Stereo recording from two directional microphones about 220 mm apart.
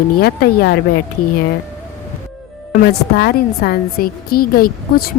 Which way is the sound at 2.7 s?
45° left (ahead or behind).